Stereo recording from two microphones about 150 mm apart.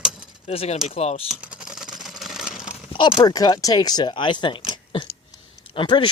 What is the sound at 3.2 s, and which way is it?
Speech, 25° left (ahead or behind).